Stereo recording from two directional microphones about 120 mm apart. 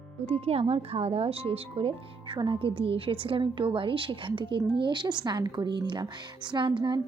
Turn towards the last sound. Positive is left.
turn(degrees=-40)  # may be behind; listen again after turning